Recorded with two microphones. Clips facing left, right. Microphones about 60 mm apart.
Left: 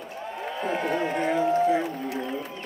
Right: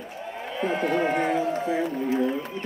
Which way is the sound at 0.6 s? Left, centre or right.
Right.